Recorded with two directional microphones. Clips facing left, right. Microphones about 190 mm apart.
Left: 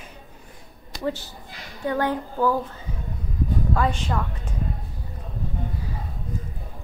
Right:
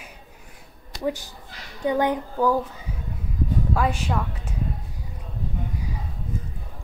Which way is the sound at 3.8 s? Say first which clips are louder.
Even; 10° right (ahead or behind).